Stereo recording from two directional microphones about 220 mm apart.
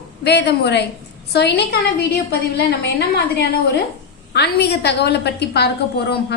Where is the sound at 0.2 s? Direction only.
50° left (ahead or behind).